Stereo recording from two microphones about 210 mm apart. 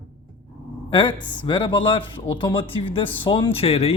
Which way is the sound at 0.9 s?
25° left (ahead or behind).